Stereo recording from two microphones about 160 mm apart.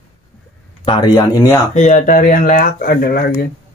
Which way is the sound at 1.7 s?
55° left (ahead or behind).